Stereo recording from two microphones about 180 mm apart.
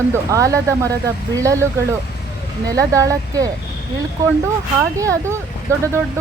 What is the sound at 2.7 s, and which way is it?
Speech, 20° right (ahead or behind).